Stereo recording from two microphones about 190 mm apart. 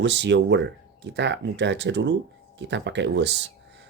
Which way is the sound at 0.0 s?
65° right (ahead or behind).